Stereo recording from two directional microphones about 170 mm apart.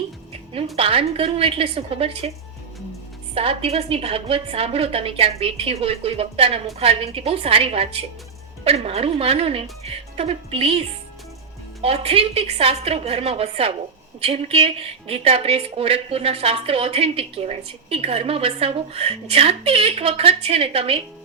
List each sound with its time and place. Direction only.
0.8 s a woman's voice: 35° right (ahead or behind)
3.3 s a woman's voice: 35° right (ahead or behind)